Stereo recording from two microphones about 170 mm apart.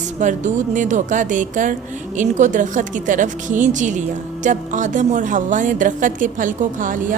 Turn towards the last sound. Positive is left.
turn(degrees=-50)  # may be behind; listen again after turning